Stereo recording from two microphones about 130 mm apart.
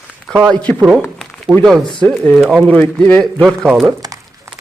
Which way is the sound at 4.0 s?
25° right (ahead or behind).